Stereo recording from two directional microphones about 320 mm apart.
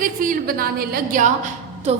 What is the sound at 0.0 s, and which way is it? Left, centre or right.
A woman's voice, right.